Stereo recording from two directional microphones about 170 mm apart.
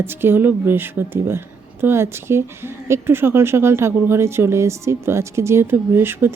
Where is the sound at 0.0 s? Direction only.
15° right (ahead or behind).